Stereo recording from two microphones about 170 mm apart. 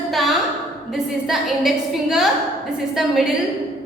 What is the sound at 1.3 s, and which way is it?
A woman's voice, centre (ahead or behind).